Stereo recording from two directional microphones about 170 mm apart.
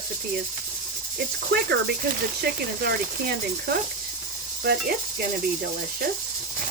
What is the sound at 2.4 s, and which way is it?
Speech, 65° right (ahead or behind).